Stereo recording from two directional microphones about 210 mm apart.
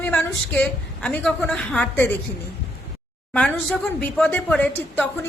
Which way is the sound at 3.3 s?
5° left (ahead or behind).